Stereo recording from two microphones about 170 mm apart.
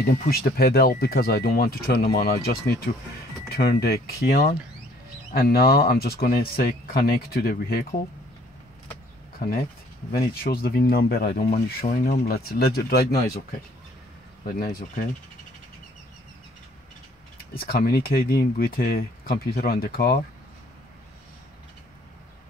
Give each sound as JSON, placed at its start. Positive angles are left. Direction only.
{"t": 0.1, "sound": "speech", "side_deg": 60}
{"t": 9.4, "sound": "speech", "side_deg": 60}
{"t": 14.4, "sound": "speech", "side_deg": 60}
{"t": 17.6, "sound": "speech", "side_deg": 60}